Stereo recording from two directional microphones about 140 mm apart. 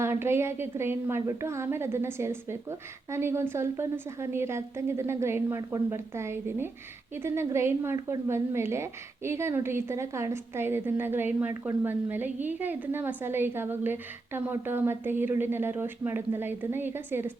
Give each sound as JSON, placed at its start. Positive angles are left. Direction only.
{"t": 0.0, "sound": "a woman's voice", "side_deg": -20}